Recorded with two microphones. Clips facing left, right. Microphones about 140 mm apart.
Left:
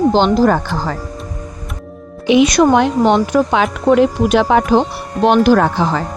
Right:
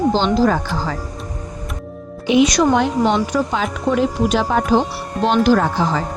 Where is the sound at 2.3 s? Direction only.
65° left (ahead or behind).